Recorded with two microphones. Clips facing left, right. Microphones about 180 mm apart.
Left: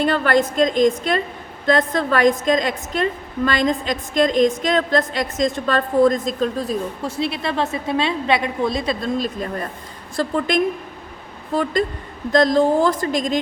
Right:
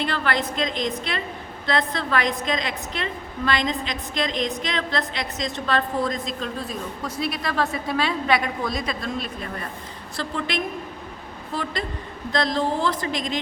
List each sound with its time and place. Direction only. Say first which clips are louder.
0.0 s a woman's voice: left 7 dB; 45° left (ahead or behind)
7.2 s a woman's voice: left 3 dB; 25° left (ahead or behind); by 13.4 s 45° left (ahead or behind)